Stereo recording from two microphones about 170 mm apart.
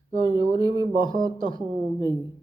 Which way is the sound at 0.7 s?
25° left (ahead or behind).